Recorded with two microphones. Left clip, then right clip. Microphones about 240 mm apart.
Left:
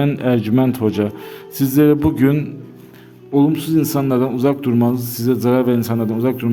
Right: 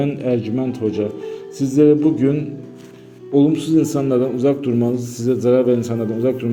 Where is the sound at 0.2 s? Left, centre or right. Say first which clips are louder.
Left 3 dB; left.